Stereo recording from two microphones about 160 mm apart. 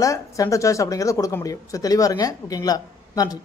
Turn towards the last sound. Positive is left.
turn(degrees=25)  # may be behind; listen again after turning